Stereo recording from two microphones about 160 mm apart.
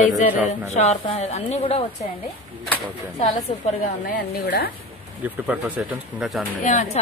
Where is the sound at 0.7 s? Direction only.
45° left (ahead or behind).